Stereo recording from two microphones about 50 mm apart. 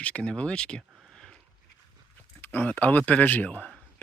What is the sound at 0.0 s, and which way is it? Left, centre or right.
Speech, left.